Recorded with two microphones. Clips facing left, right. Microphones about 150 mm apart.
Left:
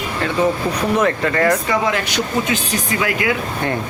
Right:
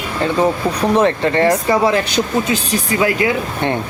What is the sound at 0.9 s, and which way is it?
Speech, 30° right (ahead or behind).